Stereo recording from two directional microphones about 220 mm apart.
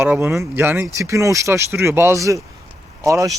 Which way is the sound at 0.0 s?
10° right (ahead or behind).